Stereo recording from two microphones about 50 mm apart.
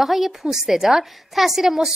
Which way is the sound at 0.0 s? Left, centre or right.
Centre.